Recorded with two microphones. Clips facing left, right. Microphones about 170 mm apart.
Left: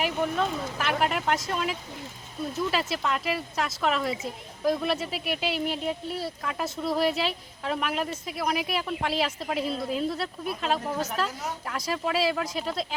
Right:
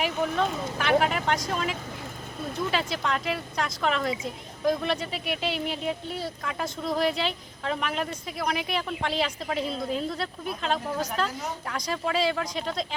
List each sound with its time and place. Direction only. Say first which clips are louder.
0.1 s speech: even; 5° left (ahead or behind)